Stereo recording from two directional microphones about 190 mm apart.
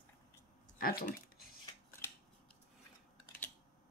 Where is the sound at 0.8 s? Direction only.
50° left (ahead or behind).